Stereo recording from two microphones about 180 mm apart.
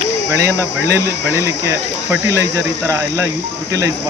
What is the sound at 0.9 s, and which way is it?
Speech, 15° right (ahead or behind).